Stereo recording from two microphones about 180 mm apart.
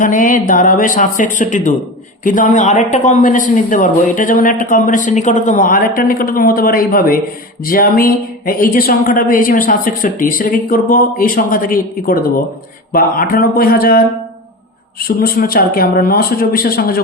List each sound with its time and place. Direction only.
0.0 s speech: 50° left (ahead or behind)